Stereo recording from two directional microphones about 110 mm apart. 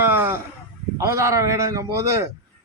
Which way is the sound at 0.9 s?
30° right (ahead or behind).